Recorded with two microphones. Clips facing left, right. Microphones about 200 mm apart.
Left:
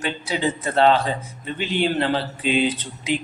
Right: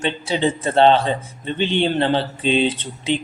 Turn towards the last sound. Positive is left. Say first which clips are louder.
# right 2 dB
turn(degrees=-25)  # may be behind; listen again after turning